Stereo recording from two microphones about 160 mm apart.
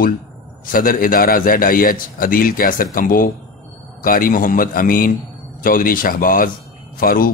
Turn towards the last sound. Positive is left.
turn(degrees=65)  # may be behind; listen again after turning